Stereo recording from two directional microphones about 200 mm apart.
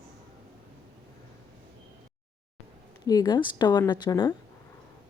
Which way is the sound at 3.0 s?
20° left (ahead or behind).